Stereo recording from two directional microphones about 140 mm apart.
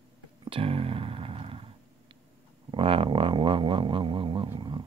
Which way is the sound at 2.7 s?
40° right (ahead or behind).